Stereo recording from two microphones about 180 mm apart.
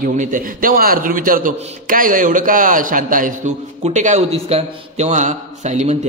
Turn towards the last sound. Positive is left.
turn(degrees=-40)  # may be behind; listen again after turning